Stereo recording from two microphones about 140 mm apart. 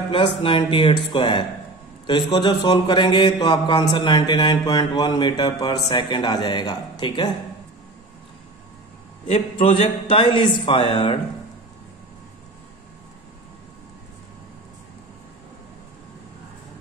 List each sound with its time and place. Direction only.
0.1 s a man's voice: 35° left (ahead or behind)
9.3 s a man's voice: 40° left (ahead or behind)